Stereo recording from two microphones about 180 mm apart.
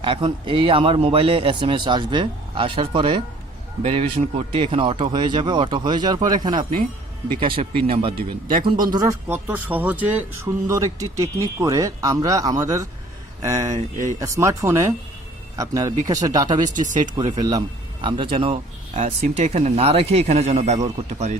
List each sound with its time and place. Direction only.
0.0 s speech: 30° right (ahead or behind)
13.7 s speech: 45° right (ahead or behind)
14.2 s speech: 15° right (ahead or behind)
16.7 s speech: 45° right (ahead or behind)
17.3 s speech: 20° right (ahead or behind)
18.9 s speech: 40° right (ahead or behind)